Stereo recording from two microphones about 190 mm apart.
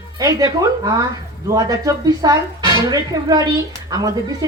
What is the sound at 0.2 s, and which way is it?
Speech, 20° right (ahead or behind).